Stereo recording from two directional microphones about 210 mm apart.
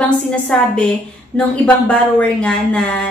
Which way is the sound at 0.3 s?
5° left (ahead or behind).